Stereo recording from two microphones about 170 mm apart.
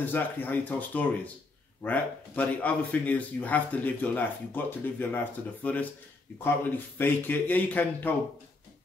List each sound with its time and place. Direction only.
0.0 s a man's voice: 10° left (ahead or behind)